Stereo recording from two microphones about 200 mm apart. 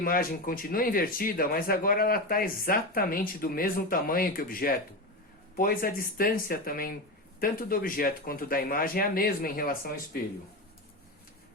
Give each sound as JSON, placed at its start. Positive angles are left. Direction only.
{"t": 0.0, "sound": "speech", "side_deg": 45}